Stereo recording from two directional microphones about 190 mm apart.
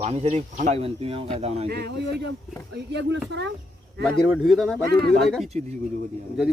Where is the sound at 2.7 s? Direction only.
65° right (ahead or behind).